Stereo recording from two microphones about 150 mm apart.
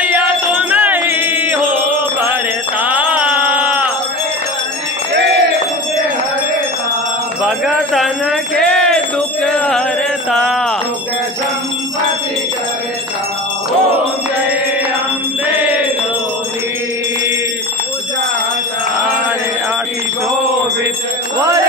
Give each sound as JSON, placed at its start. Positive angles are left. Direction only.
{"t": 0.0, "sound": "music", "side_deg": -10}
{"t": 7.4, "sound": "jingle bell", "side_deg": 0}
{"t": 10.3, "sound": "a sound", "side_deg": 5}
{"t": 15.4, "sound": "chant", "side_deg": -10}